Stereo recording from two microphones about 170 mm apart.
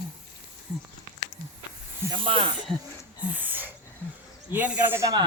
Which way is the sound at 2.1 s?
30° right (ahead or behind).